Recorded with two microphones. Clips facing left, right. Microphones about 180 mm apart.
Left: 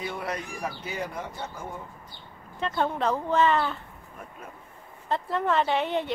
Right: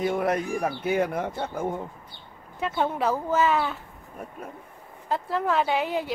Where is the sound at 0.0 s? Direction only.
50° right (ahead or behind).